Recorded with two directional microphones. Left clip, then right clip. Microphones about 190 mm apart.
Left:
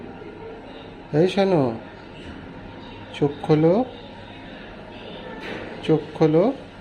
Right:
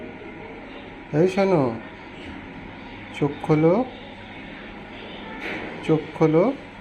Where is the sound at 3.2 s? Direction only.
15° left (ahead or behind).